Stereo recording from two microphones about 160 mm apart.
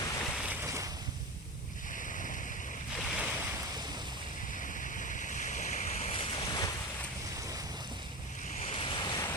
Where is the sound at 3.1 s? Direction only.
5° right (ahead or behind).